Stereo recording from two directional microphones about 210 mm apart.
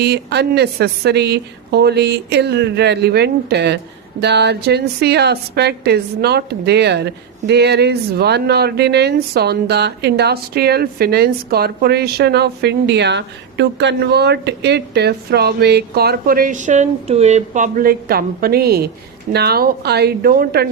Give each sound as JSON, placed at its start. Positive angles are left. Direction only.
{"t": 0.0, "sound": "a woman's voice", "side_deg": -50}